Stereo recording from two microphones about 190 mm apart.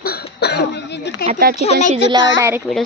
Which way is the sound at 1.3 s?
50° right (ahead or behind).